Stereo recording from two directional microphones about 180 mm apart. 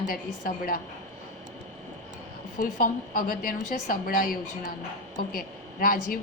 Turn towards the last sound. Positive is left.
turn(degrees=55)  # may be behind; listen again after turning